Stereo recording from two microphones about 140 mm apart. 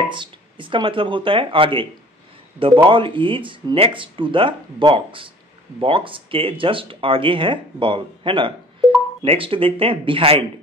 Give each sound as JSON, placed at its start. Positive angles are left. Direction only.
{"t": 0.1, "sound": "speech", "side_deg": -35}